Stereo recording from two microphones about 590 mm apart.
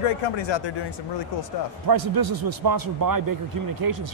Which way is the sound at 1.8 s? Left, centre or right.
Right.